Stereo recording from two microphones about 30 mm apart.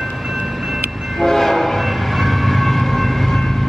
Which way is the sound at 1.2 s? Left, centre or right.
Centre.